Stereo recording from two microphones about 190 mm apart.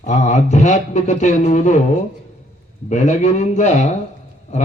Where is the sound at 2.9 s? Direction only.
40° left (ahead or behind).